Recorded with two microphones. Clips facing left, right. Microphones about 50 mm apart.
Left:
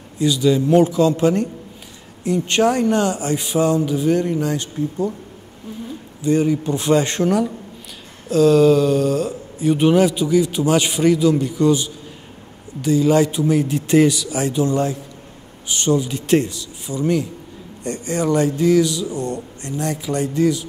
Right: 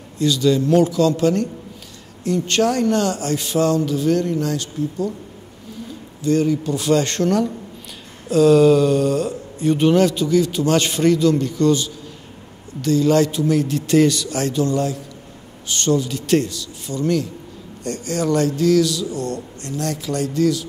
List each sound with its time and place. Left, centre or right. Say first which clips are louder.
0.2 s speech: even; centre
6.2 s speech: left 1 dB; centre